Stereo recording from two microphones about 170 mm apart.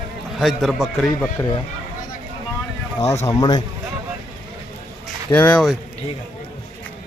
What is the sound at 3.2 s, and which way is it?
Speech, 20° left (ahead or behind).